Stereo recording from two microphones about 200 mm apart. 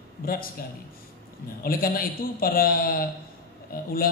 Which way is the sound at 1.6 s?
45° left (ahead or behind).